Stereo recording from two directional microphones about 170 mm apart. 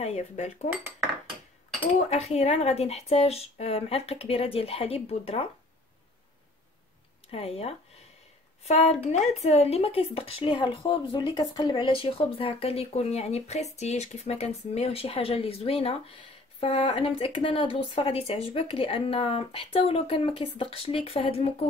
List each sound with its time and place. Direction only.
0.0 s speech: 40° left (ahead or behind)
2.0 s speech: 40° left (ahead or behind)
7.2 s speech: 35° left (ahead or behind)